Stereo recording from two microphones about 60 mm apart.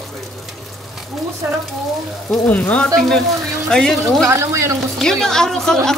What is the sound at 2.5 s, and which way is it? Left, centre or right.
Speech, centre.